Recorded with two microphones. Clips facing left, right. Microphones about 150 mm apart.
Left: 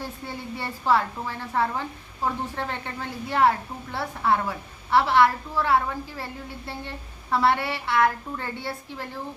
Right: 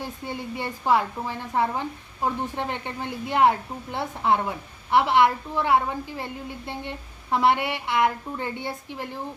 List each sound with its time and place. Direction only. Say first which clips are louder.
0.0 s a woman's voice: right 2 dB; 15° right (ahead or behind)